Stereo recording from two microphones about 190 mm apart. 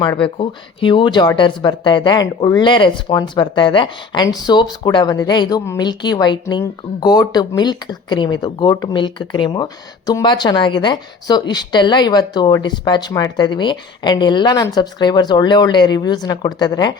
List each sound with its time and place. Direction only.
0.2 s speech: 25° left (ahead or behind)